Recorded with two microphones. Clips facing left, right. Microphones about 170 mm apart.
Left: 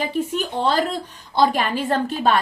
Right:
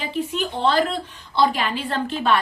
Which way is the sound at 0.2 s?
40° left (ahead or behind).